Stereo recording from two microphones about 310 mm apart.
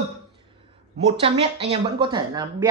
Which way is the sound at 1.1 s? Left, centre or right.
Centre.